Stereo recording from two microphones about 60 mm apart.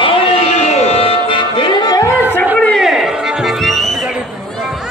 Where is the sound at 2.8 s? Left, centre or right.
Centre.